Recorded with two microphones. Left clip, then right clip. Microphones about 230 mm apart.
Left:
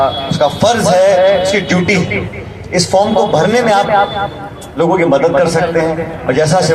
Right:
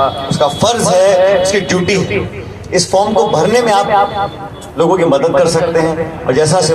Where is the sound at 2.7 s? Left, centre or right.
Right.